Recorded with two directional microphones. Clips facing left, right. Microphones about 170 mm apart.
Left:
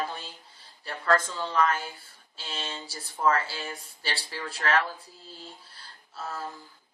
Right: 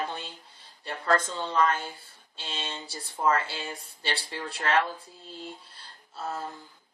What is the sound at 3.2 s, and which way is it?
Speech, 20° right (ahead or behind).